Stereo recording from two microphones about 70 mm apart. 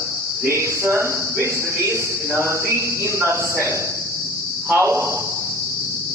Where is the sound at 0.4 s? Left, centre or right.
Right.